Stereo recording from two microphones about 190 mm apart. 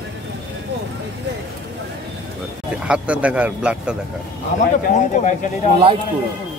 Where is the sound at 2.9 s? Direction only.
5° right (ahead or behind).